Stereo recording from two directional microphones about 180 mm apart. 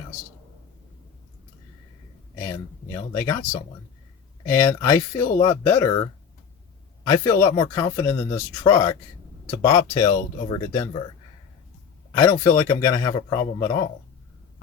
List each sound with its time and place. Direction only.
2.4 s speech: 15° left (ahead or behind)
4.4 s a man's voice: 15° left (ahead or behind)
12.2 s a man's voice: 20° left (ahead or behind)